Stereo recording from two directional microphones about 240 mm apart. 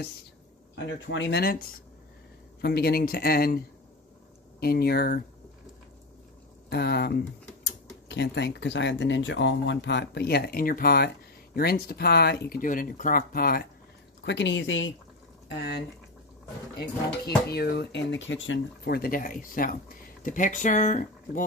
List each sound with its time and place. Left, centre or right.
1.0 s speech: left
4.6 s speech: left
6.7 s speech: left
17.2 s speech: left